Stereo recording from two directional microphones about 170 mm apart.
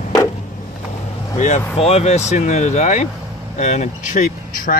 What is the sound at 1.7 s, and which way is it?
Speech, 35° left (ahead or behind).